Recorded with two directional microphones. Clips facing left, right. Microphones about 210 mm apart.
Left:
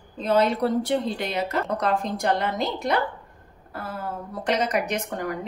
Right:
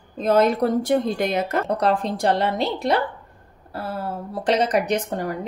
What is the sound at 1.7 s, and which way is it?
A woman's voice, 35° right (ahead or behind).